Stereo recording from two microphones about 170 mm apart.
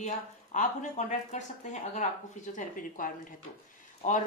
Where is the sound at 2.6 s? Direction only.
50° left (ahead or behind).